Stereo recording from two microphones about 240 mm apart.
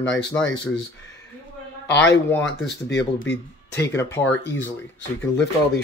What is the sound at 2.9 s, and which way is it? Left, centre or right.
Speech, left.